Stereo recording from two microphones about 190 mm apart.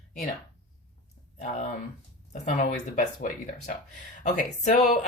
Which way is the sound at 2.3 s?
40° left (ahead or behind).